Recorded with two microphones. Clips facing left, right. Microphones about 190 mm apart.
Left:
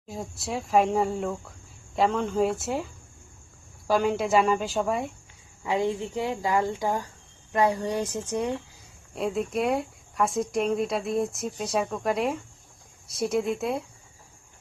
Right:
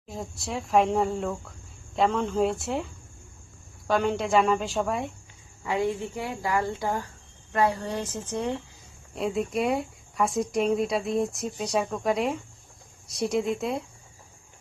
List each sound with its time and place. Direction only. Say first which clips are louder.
0.1 s speech: left 1 dB; centre (ahead or behind)
5.6 s speech: left 1 dB; 15° left (ahead or behind)
9.1 s speech: even; centre (ahead or behind)